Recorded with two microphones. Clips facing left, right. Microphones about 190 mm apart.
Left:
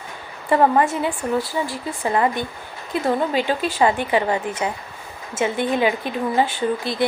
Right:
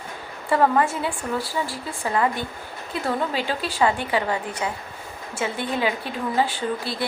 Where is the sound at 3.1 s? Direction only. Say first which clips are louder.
Left 5 dB; 15° left (ahead or behind).